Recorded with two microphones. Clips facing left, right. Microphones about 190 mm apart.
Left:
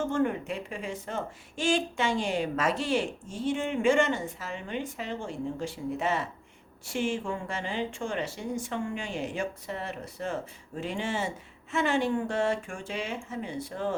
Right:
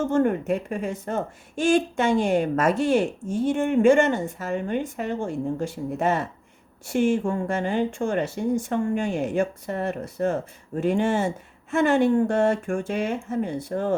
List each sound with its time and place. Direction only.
0.1 s speech: 45° right (ahead or behind)